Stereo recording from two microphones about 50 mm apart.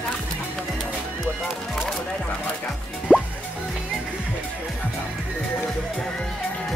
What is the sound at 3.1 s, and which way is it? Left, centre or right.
Music, centre.